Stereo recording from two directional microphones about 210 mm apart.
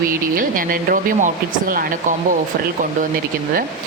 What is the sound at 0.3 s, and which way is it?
Speech, 40° right (ahead or behind).